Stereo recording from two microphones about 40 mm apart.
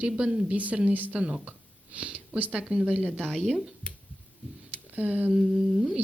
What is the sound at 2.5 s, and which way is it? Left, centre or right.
Speech, right.